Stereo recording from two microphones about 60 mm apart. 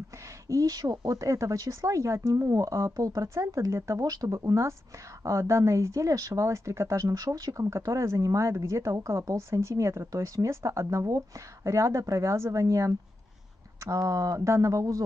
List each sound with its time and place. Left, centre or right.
0.5 s speech: right
1.3 s speech: right